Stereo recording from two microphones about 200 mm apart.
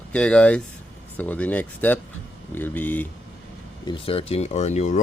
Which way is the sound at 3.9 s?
30° left (ahead or behind).